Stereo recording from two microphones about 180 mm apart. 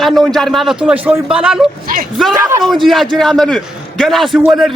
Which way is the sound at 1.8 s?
50° right (ahead or behind).